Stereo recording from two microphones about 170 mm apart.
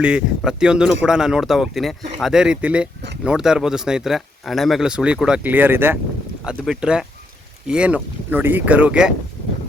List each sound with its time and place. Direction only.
0.0 s speech: 5° right (ahead or behind)